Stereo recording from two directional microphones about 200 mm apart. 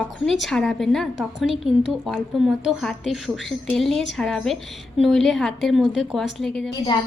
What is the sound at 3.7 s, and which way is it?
A woman's voice, centre (ahead or behind).